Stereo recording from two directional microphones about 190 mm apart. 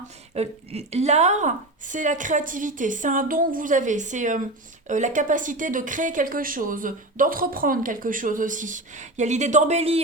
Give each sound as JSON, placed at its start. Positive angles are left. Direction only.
{"t": 0.3, "sound": "a woman's voice", "side_deg": -35}